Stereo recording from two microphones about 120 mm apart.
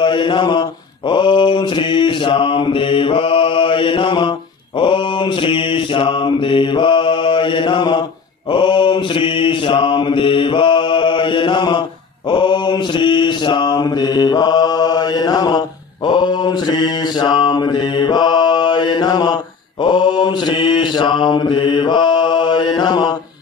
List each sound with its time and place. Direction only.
0.0 s mantra: 40° left (ahead or behind)